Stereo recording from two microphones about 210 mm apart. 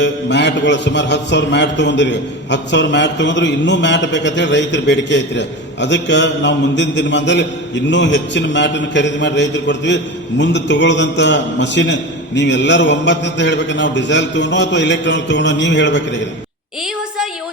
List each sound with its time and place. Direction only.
0.0 s a man's voice: 55° left (ahead or behind)